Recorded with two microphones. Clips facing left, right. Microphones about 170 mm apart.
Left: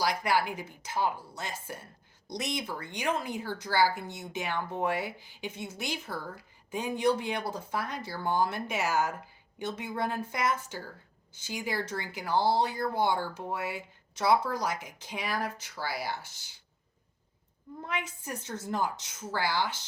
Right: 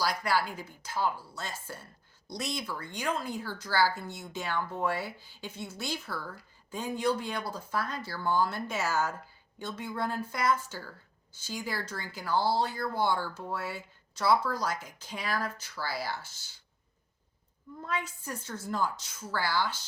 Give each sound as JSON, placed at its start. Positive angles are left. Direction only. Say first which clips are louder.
{"t": 0.0, "sound": "a woman's voice", "louder": "left 1 dB", "side_deg": 20}
{"t": 17.8, "sound": "a woman's voice", "louder": "right 1 dB", "side_deg": 20}